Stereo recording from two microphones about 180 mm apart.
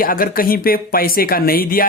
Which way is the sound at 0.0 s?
50° left (ahead or behind).